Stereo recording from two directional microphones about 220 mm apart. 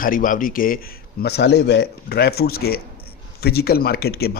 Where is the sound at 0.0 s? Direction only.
40° left (ahead or behind).